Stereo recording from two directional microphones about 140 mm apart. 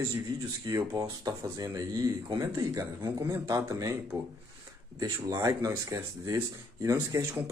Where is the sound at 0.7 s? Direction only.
25° right (ahead or behind).